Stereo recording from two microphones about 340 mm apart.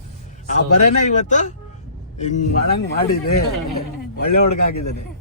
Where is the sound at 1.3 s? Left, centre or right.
Left.